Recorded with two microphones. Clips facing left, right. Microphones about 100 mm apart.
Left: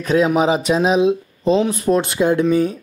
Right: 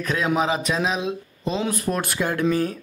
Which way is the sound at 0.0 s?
30° left (ahead or behind).